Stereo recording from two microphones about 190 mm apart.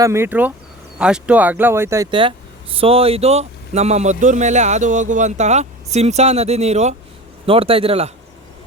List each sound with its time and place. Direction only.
0.0 s speech: 15° right (ahead or behind)
2.0 s a man's voice: 25° right (ahead or behind)